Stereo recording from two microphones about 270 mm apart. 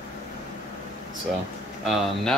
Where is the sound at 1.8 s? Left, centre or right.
Centre.